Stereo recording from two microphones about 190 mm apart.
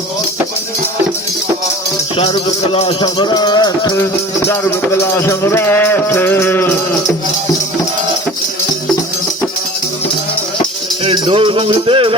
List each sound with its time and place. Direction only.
2.7 s music: 25° left (ahead or behind); by 6.7 s 10° left (ahead or behind)
11.0 s music: 30° right (ahead or behind)